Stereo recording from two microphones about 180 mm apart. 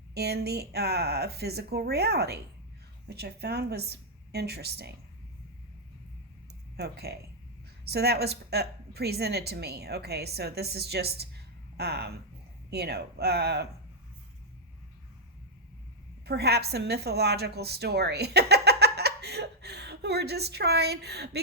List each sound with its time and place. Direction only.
0.1 s a woman's voice: 65° right (ahead or behind)
6.7 s a woman's voice: 65° right (ahead or behind)
16.2 s a woman's voice: 65° right (ahead or behind)